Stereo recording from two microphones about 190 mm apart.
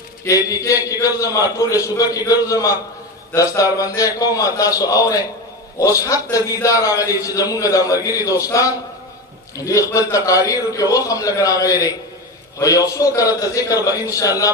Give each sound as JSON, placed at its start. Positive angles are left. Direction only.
{"t": 0.2, "sound": "a man's voice", "side_deg": 15}